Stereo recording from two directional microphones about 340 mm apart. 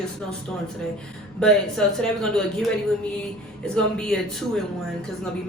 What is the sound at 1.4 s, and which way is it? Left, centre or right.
A woman's voice, centre.